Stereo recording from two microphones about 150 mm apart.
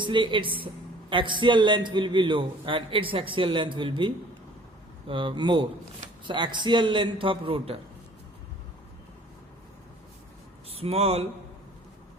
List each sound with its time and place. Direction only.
0.0 s a man's voice: 30° right (ahead or behind)
10.7 s speech: 40° right (ahead or behind)